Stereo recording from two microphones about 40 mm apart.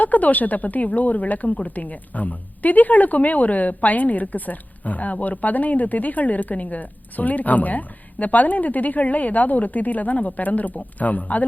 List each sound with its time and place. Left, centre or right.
0.0 s a woman's voice: left